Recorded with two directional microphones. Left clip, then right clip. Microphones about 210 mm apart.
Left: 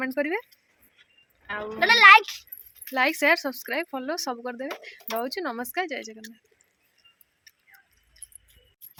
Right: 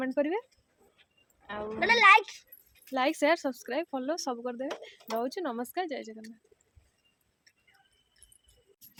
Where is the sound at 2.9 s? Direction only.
10° left (ahead or behind).